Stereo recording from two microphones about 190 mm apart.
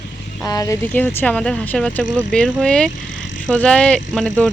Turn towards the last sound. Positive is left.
turn(degrees=0)  # may be behind; listen again after turning